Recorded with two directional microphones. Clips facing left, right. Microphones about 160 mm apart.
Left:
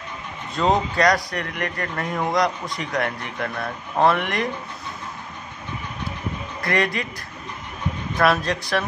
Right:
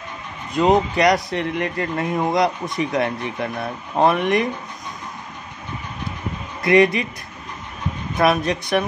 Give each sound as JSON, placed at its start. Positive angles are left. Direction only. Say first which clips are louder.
{"t": 0.6, "sound": "speech", "louder": "right 4 dB", "side_deg": -20}
{"t": 6.6, "sound": "speech", "louder": "right 8 dB", "side_deg": -20}
{"t": 8.2, "sound": "speech", "louder": "right 2 dB", "side_deg": -20}